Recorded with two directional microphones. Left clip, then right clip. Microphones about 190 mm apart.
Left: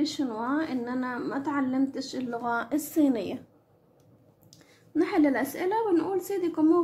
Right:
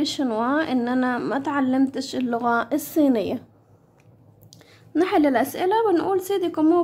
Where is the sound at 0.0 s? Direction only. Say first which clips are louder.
Right 6 dB; 30° right (ahead or behind).